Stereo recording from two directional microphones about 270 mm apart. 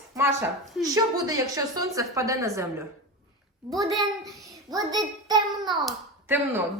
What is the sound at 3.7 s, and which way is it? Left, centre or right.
Speech, centre.